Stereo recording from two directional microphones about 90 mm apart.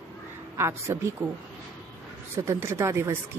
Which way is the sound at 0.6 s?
30° right (ahead or behind).